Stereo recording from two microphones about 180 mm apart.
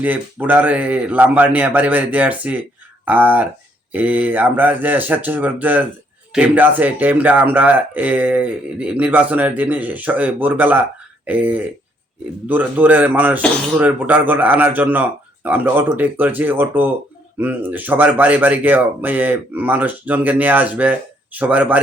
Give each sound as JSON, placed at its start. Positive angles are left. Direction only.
{"t": 0.0, "sound": "speech", "side_deg": -10}